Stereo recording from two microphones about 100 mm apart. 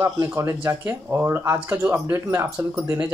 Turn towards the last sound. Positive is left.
turn(degrees=-25)  # may be behind; listen again after turning